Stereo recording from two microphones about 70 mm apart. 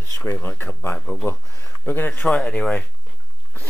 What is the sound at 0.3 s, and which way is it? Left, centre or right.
Speech, left.